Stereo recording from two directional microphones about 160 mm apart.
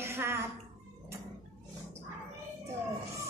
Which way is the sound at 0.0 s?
15° right (ahead or behind).